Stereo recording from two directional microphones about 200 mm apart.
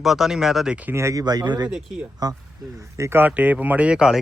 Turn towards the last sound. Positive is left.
turn(degrees=-5)  # may be behind; listen again after turning